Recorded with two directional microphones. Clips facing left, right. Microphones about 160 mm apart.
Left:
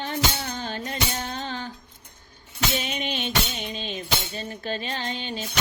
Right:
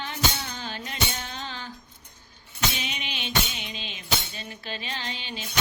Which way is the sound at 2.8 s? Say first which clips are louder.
Left 6 dB; 45° left (ahead or behind).